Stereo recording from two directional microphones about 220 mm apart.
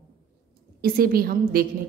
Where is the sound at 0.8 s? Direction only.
45° right (ahead or behind).